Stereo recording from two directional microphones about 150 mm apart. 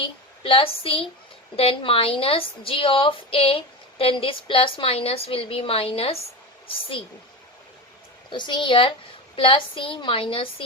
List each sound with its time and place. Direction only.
0.0 s a woman's voice: 35° left (ahead or behind)
8.3 s a woman's voice: 30° left (ahead or behind)